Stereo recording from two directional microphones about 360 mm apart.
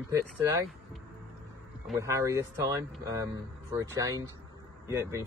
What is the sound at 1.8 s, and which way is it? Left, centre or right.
Speech, centre.